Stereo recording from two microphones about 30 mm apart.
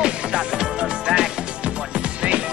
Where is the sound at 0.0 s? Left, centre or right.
Right.